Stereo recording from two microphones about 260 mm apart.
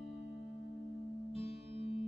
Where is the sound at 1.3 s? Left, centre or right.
Left.